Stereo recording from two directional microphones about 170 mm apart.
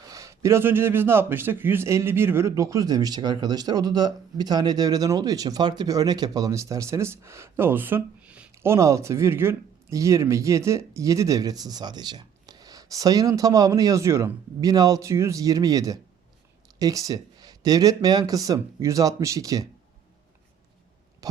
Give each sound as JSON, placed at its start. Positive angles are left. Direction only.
{"t": 0.0, "sound": "a man's voice", "side_deg": -20}